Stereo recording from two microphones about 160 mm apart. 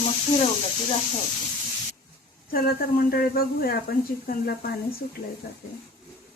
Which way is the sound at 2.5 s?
70° left (ahead or behind).